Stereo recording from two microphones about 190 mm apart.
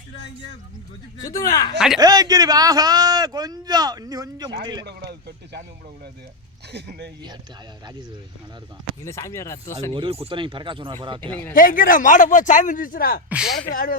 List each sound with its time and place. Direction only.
1.2 s speech: 15° left (ahead or behind)
2.0 s speech: 20° right (ahead or behind)
4.9 s speech: 60° right (ahead or behind)
6.7 s speech: 60° right (ahead or behind)
9.0 s speech: 15° left (ahead or behind)
9.9 s speech: 30° right (ahead or behind)
11.5 s a man's voice: 45° left (ahead or behind)
13.3 s a woman's voice: centre (ahead or behind)
13.7 s a man's voice: 50° left (ahead or behind)